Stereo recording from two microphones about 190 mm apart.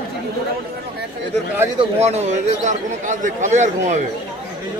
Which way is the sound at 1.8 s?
35° right (ahead or behind).